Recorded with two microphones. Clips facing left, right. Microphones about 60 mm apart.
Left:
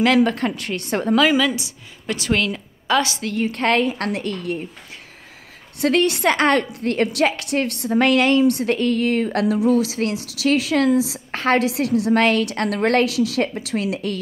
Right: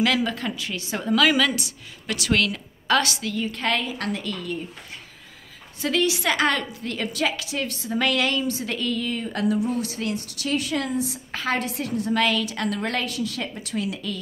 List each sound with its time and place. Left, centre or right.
0.2 s a woman's voice: left
1.1 s a woman's voice: left
3.2 s a woman's voice: left
5.8 s a woman's voice: left
6.7 s a woman's voice: left
7.9 s a woman's voice: left
8.4 s a woman's voice: left
8.6 s a woman's voice: left
9.0 s a woman's voice: left
12.1 s a woman's voice: left